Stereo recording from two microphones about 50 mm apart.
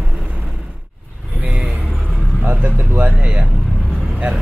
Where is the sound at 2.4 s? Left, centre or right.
Right.